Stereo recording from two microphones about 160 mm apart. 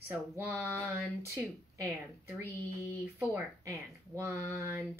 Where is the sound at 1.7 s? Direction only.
20° right (ahead or behind).